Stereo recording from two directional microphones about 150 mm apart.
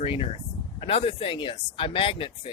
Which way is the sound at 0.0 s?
40° left (ahead or behind).